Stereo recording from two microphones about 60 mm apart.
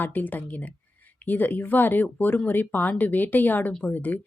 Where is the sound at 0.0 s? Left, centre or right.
Left.